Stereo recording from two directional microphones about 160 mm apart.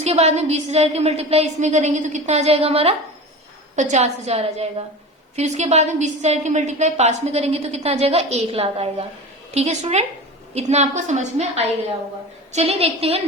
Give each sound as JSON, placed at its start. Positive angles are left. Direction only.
{"t": 0.0, "sound": "a woman's voice", "side_deg": -40}